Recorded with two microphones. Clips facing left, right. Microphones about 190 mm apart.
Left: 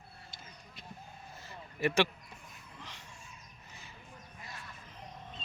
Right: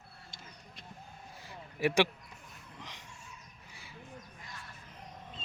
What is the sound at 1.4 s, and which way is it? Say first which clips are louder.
Vehicle: right 1 dB; 15° right (ahead or behind).